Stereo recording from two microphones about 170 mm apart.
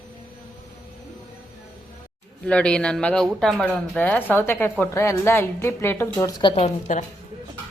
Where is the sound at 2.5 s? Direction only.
5° left (ahead or behind).